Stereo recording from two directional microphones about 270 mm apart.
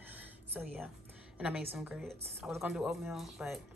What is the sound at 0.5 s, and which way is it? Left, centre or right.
A woman's voice, centre.